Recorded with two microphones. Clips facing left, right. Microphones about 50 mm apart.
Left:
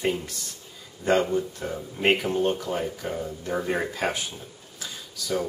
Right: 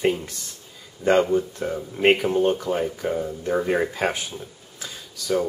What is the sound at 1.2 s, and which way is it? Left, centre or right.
Speech, centre.